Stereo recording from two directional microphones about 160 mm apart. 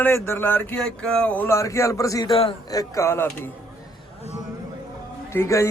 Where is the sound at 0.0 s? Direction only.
15° left (ahead or behind).